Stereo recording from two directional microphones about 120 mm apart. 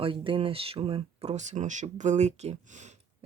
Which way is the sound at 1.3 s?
80° right.